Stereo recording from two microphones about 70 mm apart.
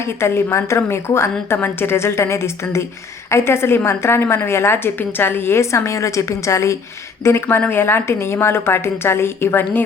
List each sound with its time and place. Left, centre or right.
0.0 s a woman's voice: left